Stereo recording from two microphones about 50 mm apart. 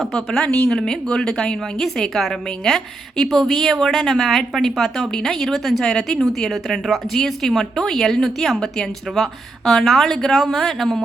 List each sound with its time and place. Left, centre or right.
0.0 s a woman's voice: centre